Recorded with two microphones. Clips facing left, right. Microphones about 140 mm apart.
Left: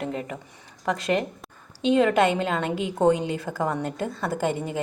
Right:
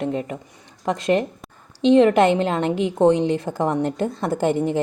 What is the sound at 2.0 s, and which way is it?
A woman's voice, 30° right (ahead or behind).